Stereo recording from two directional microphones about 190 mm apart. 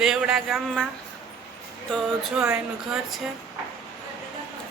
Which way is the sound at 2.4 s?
10° right (ahead or behind).